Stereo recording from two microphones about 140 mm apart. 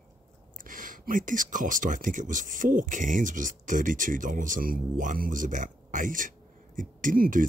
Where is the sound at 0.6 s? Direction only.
75° right (ahead or behind).